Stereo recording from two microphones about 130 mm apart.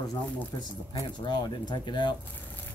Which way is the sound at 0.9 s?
35° left (ahead or behind).